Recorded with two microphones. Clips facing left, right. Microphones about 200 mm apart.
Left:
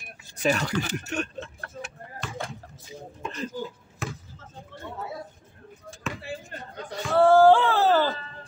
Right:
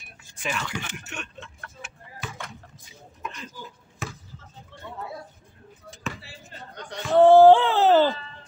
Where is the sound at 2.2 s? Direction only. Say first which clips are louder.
Even; 5° right (ahead or behind).